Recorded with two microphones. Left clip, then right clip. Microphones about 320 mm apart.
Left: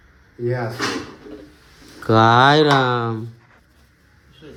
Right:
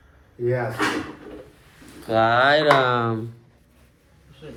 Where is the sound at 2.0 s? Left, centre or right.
Left.